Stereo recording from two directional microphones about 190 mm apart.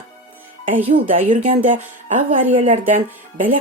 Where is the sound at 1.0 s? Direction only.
40° right (ahead or behind).